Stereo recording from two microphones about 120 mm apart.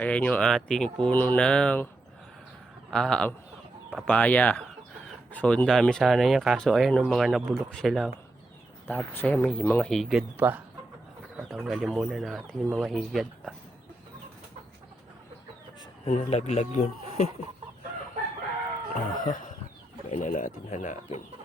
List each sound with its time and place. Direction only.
0.0 s speech: 10° left (ahead or behind)
2.9 s speech: 5° left (ahead or behind)
8.9 s speech: 15° left (ahead or behind); by 10.4 s 5° right (ahead or behind)
11.4 s speech: 5° right (ahead or behind)
16.0 s speech: 70° left (ahead or behind)
18.9 s speech: 90° left